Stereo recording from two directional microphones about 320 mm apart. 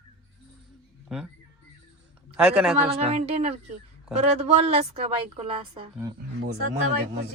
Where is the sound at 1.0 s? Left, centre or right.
Centre.